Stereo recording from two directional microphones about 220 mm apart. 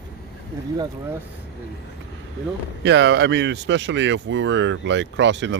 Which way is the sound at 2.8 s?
50° right (ahead or behind).